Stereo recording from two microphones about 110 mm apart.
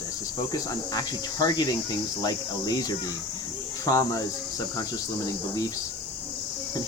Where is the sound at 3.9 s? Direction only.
30° left (ahead or behind).